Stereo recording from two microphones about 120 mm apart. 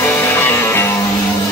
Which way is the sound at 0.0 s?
20° left (ahead or behind).